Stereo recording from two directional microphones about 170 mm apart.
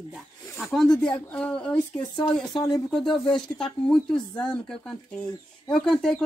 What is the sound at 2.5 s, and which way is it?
Speech, 25° left (ahead or behind).